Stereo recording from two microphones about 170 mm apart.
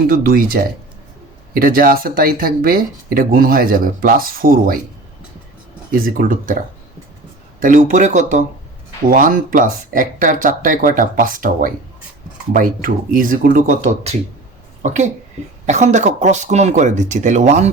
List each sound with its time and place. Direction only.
0.1 s speech: 60° right (ahead or behind)
5.9 s speech: 55° right (ahead or behind)
7.6 s speech: 50° right (ahead or behind)